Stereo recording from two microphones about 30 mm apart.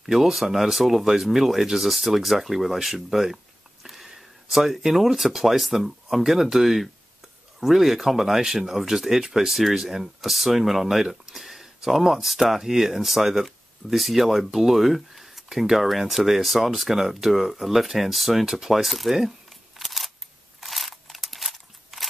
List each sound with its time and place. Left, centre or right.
0.0 s speech: centre
9.5 s speech: centre
18.4 s speech: centre
18.7 s speech: centre
19.8 s single-lens reflex camera: centre
20.6 s a sound: centre